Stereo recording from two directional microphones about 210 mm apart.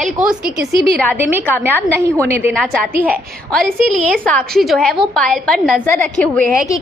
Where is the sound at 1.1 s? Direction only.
10° right (ahead or behind).